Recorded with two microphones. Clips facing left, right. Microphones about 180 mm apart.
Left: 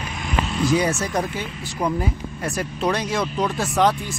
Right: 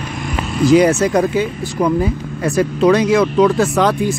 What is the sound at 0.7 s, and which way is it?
Speech, 90° right.